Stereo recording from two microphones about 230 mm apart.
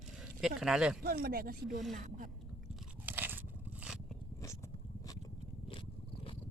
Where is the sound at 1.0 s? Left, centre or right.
Right.